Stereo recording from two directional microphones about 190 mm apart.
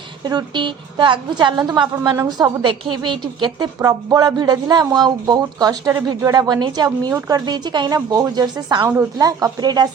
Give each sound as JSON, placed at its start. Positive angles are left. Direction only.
{"t": 0.3, "sound": "speech", "side_deg": -25}